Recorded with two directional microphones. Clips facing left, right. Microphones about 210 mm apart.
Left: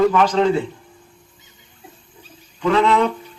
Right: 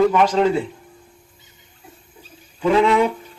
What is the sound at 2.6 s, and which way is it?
Speech, 10° right (ahead or behind).